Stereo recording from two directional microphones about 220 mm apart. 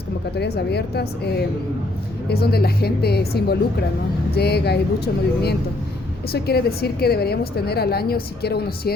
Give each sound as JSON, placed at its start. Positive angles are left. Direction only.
{"t": 0.3, "sound": "a woman's voice", "side_deg": 50}
{"t": 2.3, "sound": "a woman's voice", "side_deg": 45}